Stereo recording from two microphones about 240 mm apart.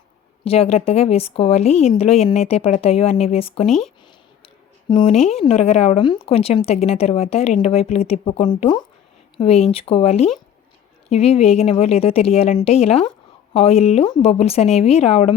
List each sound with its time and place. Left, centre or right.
0.4 s a woman's voice: left
3.7 s speech: centre
4.4 s a sound: left
5.4 s a woman's voice: left